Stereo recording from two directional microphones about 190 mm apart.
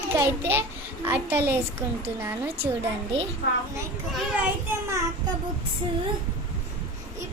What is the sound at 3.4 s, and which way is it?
Speech, 65° left (ahead or behind).